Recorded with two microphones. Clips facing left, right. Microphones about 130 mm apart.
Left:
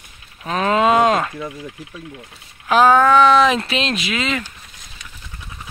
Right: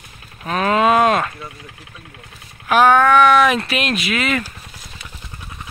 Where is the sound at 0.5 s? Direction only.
25° left (ahead or behind).